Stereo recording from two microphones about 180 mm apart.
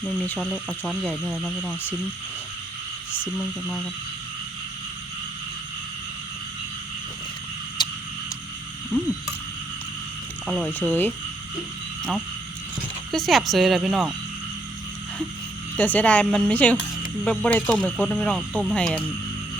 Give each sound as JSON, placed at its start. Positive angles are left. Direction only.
{"t": 0.3, "sound": "speech", "side_deg": 0}
{"t": 3.3, "sound": "speech", "side_deg": 5}
{"t": 7.8, "sound": "a sound", "side_deg": 25}
{"t": 10.4, "sound": "speech", "side_deg": 0}
{"t": 10.7, "sound": "speech", "side_deg": 10}
{"t": 13.1, "sound": "speech", "side_deg": 0}
{"t": 15.7, "sound": "speech", "side_deg": 10}